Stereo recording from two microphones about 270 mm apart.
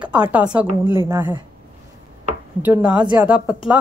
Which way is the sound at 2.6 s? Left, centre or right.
Centre.